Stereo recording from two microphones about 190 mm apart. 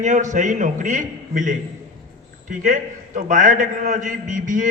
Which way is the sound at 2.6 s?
40° right (ahead or behind).